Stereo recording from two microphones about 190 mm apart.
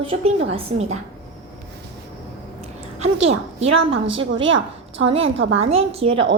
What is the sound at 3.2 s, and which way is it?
Speech, 35° right (ahead or behind).